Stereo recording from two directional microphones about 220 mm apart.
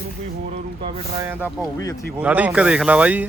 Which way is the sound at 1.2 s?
10° right (ahead or behind).